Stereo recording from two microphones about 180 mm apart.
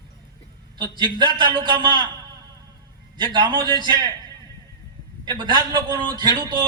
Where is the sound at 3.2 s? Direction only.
25° right (ahead or behind).